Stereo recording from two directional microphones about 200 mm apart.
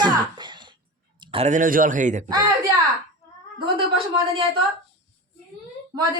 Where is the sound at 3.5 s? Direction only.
25° right (ahead or behind).